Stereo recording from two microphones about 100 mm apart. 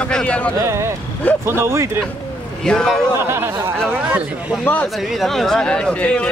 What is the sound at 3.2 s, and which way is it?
Speech, 25° right (ahead or behind).